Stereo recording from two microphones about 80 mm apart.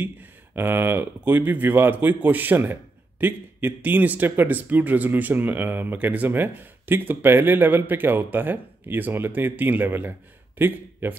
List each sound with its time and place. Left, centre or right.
0.6 s speech: right